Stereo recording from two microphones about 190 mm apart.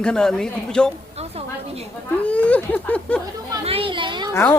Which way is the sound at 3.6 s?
30° right (ahead or behind).